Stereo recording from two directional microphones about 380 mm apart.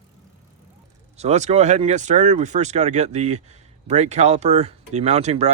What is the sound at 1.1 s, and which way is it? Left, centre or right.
Speech, centre.